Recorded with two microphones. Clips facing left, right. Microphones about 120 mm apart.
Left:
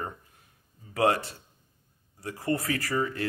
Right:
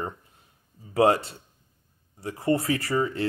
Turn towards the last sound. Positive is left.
turn(degrees=-25)  # may be behind; listen again after turning